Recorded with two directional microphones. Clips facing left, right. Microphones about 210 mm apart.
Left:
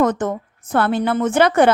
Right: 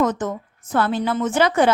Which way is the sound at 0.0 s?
60° left (ahead or behind).